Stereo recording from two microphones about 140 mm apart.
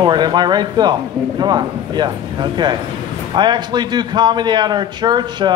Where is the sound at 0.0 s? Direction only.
30° right (ahead or behind).